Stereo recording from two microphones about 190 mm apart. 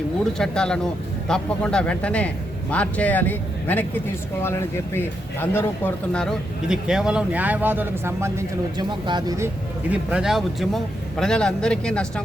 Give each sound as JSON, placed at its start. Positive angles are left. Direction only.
{"t": 0.3, "sound": "a man's voice", "side_deg": 5}
{"t": 4.9, "sound": "a man's voice", "side_deg": 10}
{"t": 9.9, "sound": "a man's voice", "side_deg": -5}